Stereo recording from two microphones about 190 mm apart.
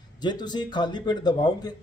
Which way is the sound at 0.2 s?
20° left (ahead or behind).